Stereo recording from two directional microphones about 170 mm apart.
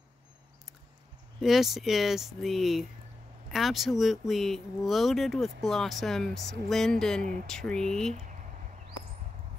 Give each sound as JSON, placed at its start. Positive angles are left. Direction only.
{"t": 1.4, "sound": "speech", "side_deg": 0}